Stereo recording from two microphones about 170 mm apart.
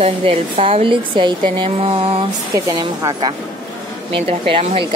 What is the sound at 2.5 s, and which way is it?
A woman's voice, 20° right (ahead or behind).